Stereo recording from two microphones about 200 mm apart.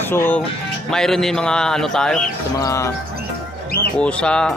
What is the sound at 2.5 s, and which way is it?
Speech, 15° left (ahead or behind).